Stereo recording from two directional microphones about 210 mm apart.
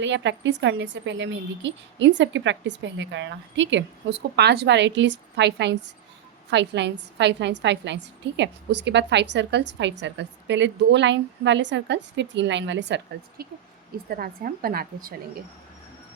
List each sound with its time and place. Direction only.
0.0 s a woman's voice: 60° right (ahead or behind)
13.4 s a woman's voice: 45° right (ahead or behind)